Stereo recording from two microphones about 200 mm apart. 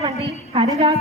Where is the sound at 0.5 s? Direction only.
25° right (ahead or behind).